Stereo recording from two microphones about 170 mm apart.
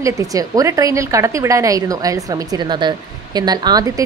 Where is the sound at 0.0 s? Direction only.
20° right (ahead or behind).